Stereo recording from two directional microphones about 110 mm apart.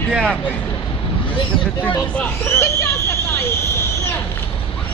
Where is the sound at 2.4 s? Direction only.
25° left (ahead or behind).